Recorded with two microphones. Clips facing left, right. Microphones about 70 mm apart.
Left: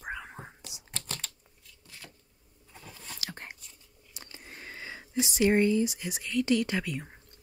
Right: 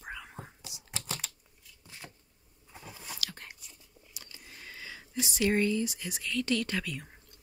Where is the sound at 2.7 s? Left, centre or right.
Centre.